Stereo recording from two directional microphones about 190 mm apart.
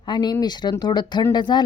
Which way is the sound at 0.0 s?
25° left (ahead or behind).